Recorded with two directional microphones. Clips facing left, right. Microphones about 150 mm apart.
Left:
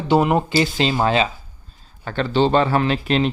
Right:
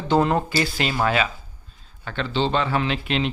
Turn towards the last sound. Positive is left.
turn(degrees=40)  # may be behind; listen again after turning